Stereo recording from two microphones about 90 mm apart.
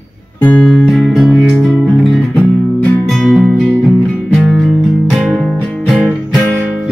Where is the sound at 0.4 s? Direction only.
15° left (ahead or behind).